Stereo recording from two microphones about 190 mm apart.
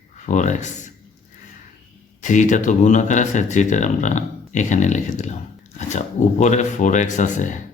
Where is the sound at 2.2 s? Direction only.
40° left (ahead or behind).